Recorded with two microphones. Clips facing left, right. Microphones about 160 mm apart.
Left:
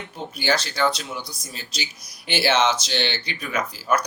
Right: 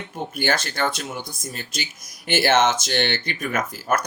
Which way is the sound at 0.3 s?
50° right (ahead or behind).